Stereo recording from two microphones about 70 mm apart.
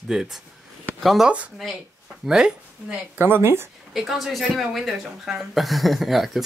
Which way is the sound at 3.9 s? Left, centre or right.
Centre.